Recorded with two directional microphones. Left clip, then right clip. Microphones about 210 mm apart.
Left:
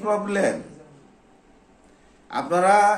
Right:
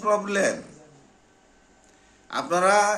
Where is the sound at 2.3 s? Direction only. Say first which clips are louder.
Left 2 dB; 15° right (ahead or behind).